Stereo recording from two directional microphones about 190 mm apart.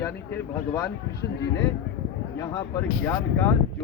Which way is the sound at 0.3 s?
20° left (ahead or behind).